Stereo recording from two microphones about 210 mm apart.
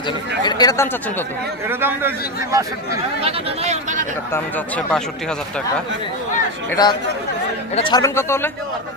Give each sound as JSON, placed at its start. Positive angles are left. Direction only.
{"t": 0.4, "sound": "speech", "side_deg": 20}
{"t": 1.6, "sound": "a man's voice", "side_deg": -10}
{"t": 3.2, "sound": "speech", "side_deg": -30}
{"t": 4.3, "sound": "speech", "side_deg": 10}
{"t": 6.7, "sound": "speech", "side_deg": 20}